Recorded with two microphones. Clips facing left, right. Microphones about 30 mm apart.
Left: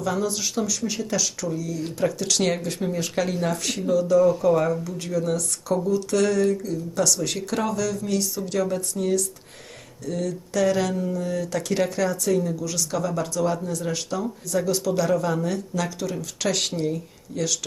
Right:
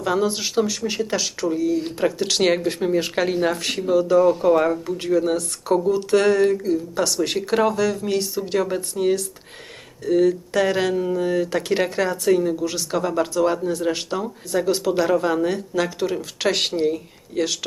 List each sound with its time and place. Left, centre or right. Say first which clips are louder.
0.0 s speech: right 4 dB; right